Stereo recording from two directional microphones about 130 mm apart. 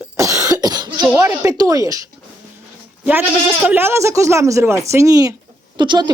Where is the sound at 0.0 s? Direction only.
25° right (ahead or behind).